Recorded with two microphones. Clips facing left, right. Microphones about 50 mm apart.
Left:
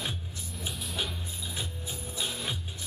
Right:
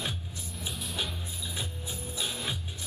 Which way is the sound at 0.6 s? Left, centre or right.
Centre.